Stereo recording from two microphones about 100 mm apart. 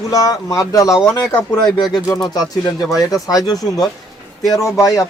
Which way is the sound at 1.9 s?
40° left (ahead or behind).